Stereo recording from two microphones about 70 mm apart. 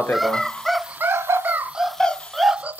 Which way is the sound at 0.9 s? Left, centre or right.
Right.